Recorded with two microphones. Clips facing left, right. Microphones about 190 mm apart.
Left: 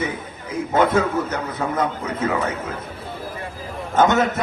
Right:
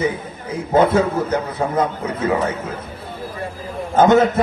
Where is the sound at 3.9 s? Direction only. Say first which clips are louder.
Right 5 dB; 30° right (ahead or behind).